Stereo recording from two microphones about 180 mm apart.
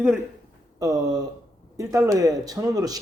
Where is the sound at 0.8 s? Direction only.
20° right (ahead or behind).